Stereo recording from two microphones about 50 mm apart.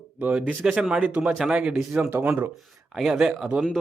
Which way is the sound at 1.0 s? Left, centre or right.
Right.